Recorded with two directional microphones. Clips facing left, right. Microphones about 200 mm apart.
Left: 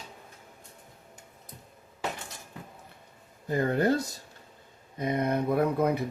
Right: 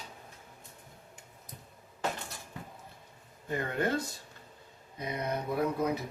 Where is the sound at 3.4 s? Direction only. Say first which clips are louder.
Left 7 dB; 40° left (ahead or behind).